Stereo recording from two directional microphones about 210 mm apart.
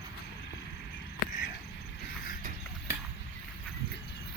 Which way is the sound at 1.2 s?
40° left (ahead or behind).